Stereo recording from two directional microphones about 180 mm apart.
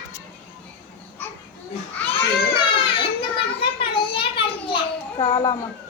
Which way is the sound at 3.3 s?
30° left (ahead or behind).